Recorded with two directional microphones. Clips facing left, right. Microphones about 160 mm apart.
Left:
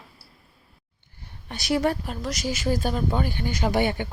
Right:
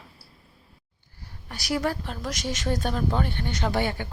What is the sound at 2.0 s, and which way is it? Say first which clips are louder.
Speech: left 2 dB; centre (ahead or behind).